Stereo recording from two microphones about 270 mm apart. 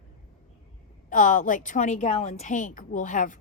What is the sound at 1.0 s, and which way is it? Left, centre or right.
Speech, left.